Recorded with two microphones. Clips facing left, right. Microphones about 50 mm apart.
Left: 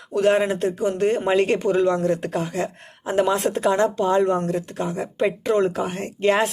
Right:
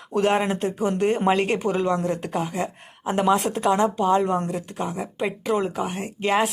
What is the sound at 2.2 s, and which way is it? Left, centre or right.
Speech, centre.